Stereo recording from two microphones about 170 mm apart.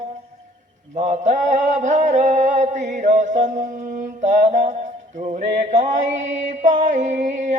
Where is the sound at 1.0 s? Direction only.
45° right (ahead or behind).